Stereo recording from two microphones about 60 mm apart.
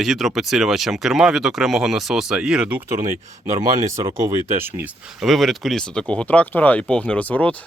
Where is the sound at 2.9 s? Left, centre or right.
Right.